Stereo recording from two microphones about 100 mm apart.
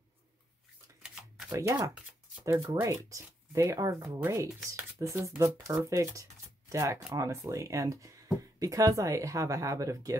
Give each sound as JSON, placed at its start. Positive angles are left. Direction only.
{"t": 1.5, "sound": "speech", "side_deg": -35}